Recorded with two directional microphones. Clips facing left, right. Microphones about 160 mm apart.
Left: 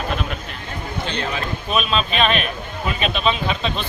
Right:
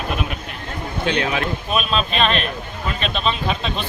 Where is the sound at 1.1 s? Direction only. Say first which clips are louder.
Right 6 dB; 65° right (ahead or behind).